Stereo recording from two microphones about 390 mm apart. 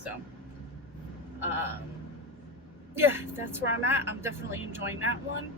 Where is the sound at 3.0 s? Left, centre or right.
Centre.